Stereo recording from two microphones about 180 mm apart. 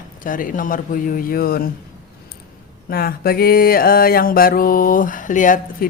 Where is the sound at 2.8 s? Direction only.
55° left (ahead or behind).